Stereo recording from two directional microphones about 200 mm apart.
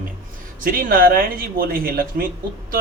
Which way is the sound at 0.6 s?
45° right (ahead or behind).